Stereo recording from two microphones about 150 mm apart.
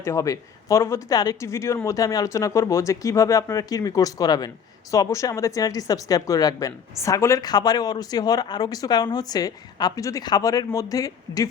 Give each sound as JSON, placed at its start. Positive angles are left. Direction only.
{"t": 0.0, "sound": "speech", "side_deg": 20}